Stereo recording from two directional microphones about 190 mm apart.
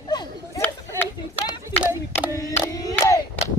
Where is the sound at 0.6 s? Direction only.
10° left (ahead or behind).